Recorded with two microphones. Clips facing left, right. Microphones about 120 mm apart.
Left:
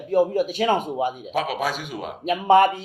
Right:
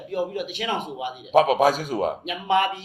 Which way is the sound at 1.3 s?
45° right (ahead or behind).